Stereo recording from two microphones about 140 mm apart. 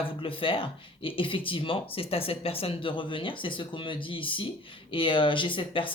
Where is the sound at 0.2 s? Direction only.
40° left (ahead or behind).